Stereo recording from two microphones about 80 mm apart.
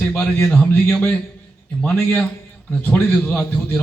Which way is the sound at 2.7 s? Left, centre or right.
Left.